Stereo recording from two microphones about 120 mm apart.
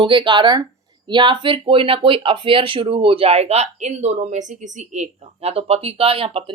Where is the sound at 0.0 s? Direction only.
40° right (ahead or behind).